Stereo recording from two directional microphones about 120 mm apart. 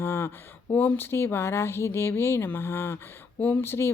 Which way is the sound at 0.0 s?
20° left (ahead or behind).